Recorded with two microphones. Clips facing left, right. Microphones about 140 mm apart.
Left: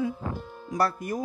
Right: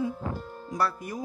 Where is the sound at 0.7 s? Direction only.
50° left (ahead or behind).